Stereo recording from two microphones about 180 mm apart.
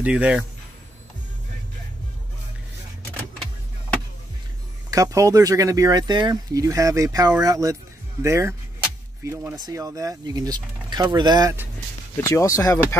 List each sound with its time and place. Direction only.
0.0 s speech: 5° right (ahead or behind)
4.9 s speech: 20° right (ahead or behind)
12.2 s speech: 15° left (ahead or behind)